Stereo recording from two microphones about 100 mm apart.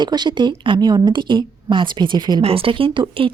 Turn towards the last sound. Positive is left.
turn(degrees=-65)  # may be behind; listen again after turning